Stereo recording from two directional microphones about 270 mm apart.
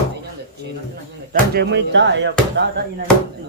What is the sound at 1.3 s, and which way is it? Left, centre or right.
Speech, right.